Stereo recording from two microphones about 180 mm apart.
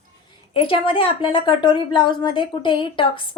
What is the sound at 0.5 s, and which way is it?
Speech, 30° left (ahead or behind).